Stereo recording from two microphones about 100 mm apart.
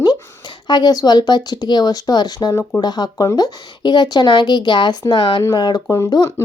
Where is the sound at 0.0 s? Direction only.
45° left (ahead or behind).